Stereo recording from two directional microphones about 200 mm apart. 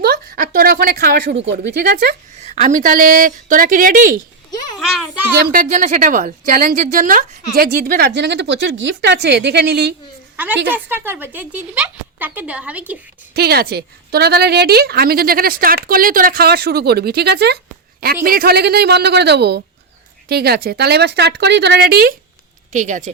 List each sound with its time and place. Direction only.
0.0 s a sound: 50° right (ahead or behind)
1.5 s a woman's voice: 50° right (ahead or behind)
2.4 s a woman's voice: 35° right (ahead or behind)
4.8 s a child's voice: centre (ahead or behind)
5.5 s a woman's voice: 40° right (ahead or behind)
10.3 s a woman's voice: 10° right (ahead or behind)
13.3 s a woman's voice: 50° right (ahead or behind)
22.7 s speech: 40° right (ahead or behind)